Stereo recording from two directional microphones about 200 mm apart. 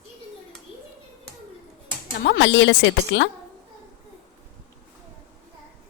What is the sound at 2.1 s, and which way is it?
Speech, 60° left (ahead or behind).